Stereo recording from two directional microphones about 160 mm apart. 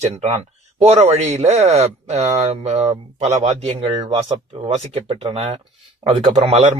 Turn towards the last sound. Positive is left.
turn(degrees=-40)  # may be behind; listen again after turning